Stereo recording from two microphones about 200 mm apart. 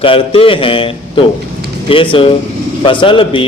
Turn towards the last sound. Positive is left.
turn(degrees=25)  # may be behind; listen again after turning